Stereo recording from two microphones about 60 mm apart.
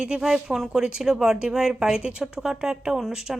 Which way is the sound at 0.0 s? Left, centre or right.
Centre.